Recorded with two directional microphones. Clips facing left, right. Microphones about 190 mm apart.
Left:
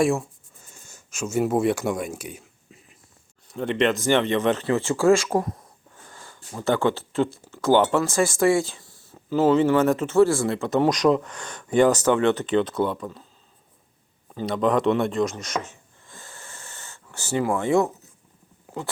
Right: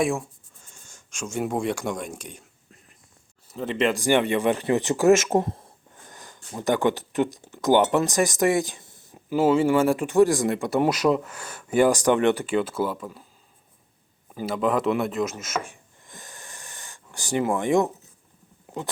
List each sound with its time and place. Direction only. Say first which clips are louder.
0.0 s a sound: left 3 dB; centre (ahead or behind)
3.5 s speech: left 2 dB; centre (ahead or behind)
14.3 s chopping: left 2 dB; 5° right (ahead or behind)
18.7 s speech: even; 20° right (ahead or behind)